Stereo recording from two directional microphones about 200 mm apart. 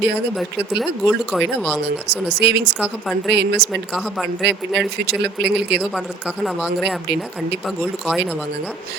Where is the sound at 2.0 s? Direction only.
55° right (ahead or behind).